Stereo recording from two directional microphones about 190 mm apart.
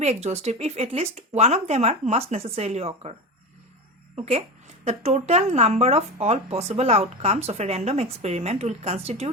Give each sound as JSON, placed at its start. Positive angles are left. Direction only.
{"t": 0.0, "sound": "speech", "side_deg": -35}